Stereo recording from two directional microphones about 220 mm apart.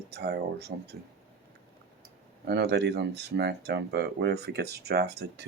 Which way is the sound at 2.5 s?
50° right (ahead or behind).